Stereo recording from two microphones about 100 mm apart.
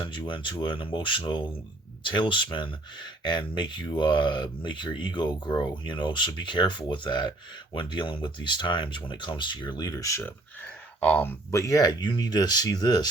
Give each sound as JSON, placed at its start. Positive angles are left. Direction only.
{"t": 0.3, "sound": "speech", "side_deg": 55}
{"t": 10.2, "sound": "speech", "side_deg": 15}